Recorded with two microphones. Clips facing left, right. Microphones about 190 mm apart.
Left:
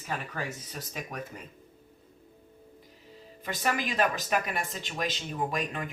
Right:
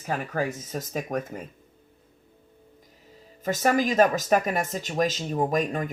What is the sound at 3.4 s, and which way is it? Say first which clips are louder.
Speech: right 8 dB; 45° right (ahead or behind).